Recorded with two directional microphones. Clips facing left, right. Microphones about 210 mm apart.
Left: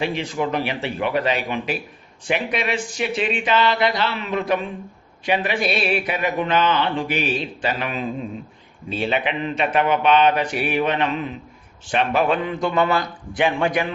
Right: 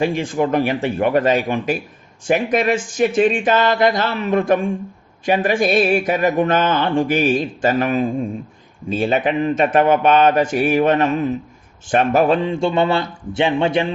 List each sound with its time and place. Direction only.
0.0 s speech: 50° right (ahead or behind)
12.4 s a man's voice: 25° right (ahead or behind)